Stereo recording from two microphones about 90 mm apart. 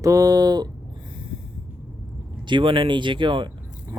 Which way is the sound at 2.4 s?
65° right (ahead or behind).